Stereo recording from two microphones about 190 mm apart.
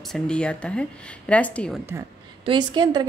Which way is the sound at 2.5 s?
25° right (ahead or behind).